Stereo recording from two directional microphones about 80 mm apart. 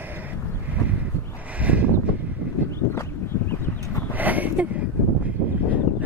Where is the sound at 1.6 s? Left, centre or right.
Centre.